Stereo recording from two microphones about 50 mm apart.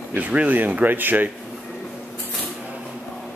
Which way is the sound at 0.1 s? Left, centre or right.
Right.